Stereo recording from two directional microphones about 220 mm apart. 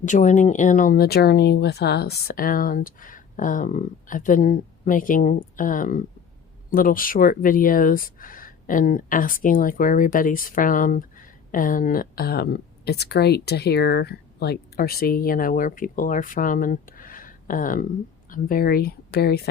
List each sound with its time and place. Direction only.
0.0 s speech: 35° left (ahead or behind)